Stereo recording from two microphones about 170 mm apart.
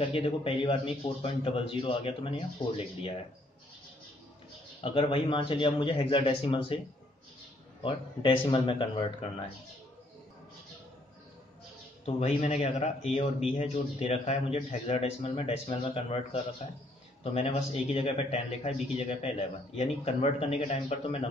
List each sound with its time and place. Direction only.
0.0 s a man's voice: 35° left (ahead or behind)
4.8 s a man's voice: 30° left (ahead or behind)
7.8 s a man's voice: 30° left (ahead or behind)
12.1 s a man's voice: 40° left (ahead or behind)